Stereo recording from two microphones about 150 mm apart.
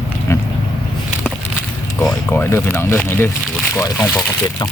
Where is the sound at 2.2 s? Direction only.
15° left (ahead or behind).